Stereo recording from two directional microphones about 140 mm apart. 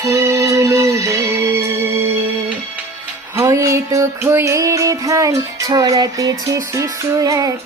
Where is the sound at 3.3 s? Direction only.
20° right (ahead or behind).